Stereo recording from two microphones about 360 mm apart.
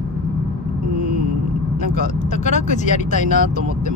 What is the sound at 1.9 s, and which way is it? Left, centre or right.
Speech, centre.